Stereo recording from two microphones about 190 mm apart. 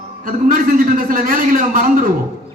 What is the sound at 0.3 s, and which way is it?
A man's voice, 45° right (ahead or behind).